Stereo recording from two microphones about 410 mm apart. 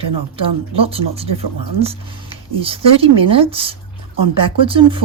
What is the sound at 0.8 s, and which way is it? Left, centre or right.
Speech, centre.